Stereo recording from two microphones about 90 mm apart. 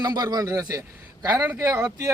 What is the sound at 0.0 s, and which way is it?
Speech, 50° right (ahead or behind).